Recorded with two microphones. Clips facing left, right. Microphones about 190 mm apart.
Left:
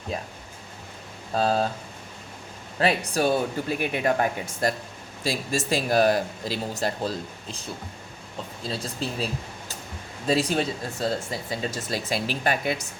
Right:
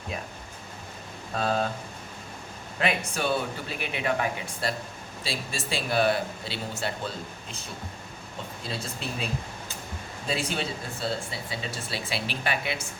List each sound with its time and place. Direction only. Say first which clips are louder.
0.1 s speech: left 4 dB; 35° left (ahead or behind)
1.3 s speech: left 4 dB; 35° left (ahead or behind)
2.7 s speech: left 5 dB; 35° left (ahead or behind)
8.7 s speech: left 4 dB; 35° left (ahead or behind)